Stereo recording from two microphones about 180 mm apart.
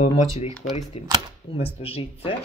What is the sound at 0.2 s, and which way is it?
Speech, 35° left (ahead or behind).